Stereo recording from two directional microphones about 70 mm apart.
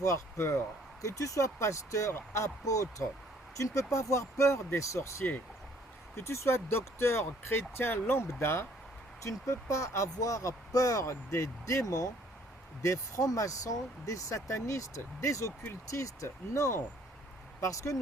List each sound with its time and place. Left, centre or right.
0.0 s speech: left
1.0 s speech: left
9.2 s speech: left